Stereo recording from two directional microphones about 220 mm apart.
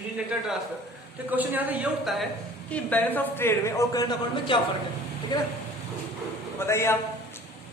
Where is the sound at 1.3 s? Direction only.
10° right (ahead or behind); by 4.6 s 20° left (ahead or behind).